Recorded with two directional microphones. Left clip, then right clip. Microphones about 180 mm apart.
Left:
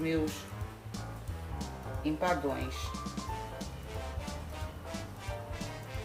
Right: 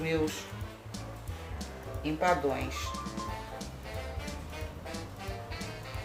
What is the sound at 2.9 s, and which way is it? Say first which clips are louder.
Music: right 2 dB; centre (ahead or behind).